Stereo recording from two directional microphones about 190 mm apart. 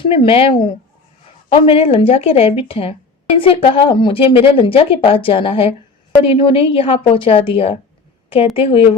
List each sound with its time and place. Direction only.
0.0 s speech: 30° left (ahead or behind)